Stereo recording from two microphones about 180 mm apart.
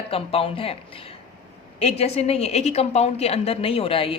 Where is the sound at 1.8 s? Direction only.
35° left (ahead or behind).